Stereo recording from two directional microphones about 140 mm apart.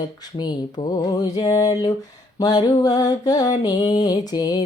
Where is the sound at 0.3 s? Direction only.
30° left (ahead or behind).